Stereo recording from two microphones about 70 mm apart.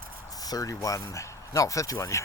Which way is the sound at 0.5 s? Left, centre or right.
Left.